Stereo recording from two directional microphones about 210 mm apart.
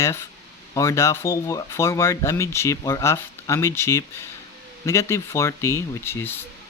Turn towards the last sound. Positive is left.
turn(degrees=10)  # may be behind; listen again after turning